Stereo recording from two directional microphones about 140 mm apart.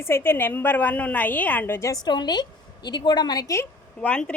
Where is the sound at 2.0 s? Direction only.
30° left (ahead or behind).